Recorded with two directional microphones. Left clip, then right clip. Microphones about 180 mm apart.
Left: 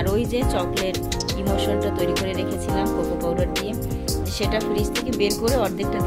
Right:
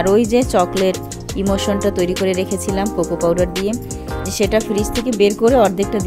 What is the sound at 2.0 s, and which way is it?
Speech, 60° right (ahead or behind).